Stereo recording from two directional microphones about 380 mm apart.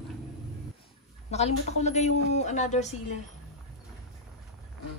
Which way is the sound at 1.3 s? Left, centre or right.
Centre.